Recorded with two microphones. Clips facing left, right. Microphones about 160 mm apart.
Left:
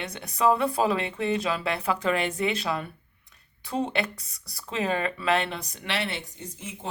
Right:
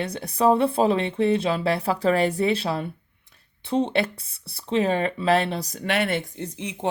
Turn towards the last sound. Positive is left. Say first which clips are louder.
# right 8 dB
turn(degrees=-55)  # may be behind; listen again after turning